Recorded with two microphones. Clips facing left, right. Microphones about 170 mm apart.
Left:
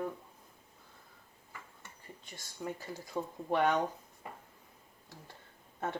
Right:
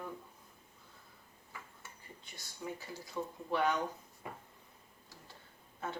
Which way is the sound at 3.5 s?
55° left (ahead or behind).